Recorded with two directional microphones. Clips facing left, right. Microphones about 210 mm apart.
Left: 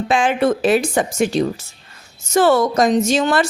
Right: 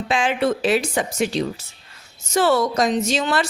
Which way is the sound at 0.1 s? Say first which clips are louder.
Left 3 dB; 50° left (ahead or behind).